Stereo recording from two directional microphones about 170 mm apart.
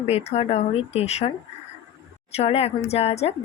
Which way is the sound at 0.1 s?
40° left (ahead or behind).